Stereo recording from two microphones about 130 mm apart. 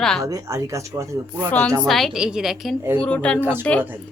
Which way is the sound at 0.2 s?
25° right (ahead or behind).